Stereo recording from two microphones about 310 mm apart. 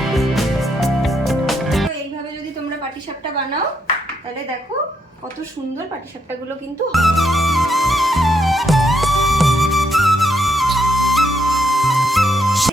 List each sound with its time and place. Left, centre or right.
0.0 s music: centre
6.9 s music: centre